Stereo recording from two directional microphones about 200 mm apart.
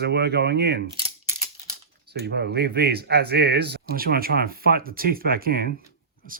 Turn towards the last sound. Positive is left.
turn(degrees=-50)  # may be behind; listen again after turning